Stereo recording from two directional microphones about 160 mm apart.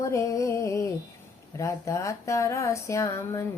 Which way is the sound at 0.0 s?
20° left (ahead or behind).